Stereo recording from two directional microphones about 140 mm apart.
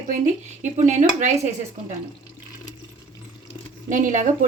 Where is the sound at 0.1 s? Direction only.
60° right (ahead or behind).